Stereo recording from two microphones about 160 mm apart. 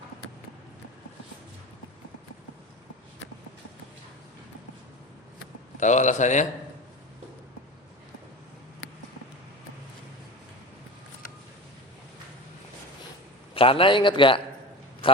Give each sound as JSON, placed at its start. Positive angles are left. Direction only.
{"t": 5.8, "sound": "speech", "side_deg": 50}
{"t": 13.5, "sound": "a man's voice", "side_deg": 35}
{"t": 15.0, "sound": "a sound", "side_deg": 35}